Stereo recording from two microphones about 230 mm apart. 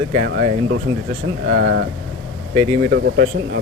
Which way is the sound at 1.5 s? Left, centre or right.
Right.